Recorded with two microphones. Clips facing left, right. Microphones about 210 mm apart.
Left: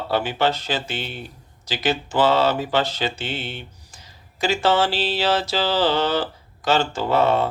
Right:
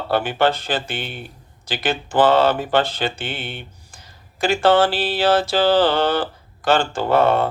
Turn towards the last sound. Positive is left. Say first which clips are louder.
# right 2 dB
turn(degrees=-55)  # may be behind; listen again after turning